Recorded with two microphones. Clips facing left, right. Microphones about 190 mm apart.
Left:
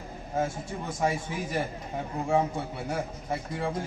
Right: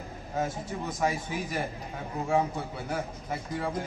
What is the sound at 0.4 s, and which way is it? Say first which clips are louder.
A man's voice: left 1 dB; 30° left (ahead or behind).